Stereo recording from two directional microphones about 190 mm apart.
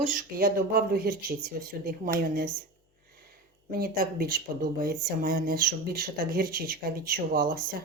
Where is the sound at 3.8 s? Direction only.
50° right (ahead or behind).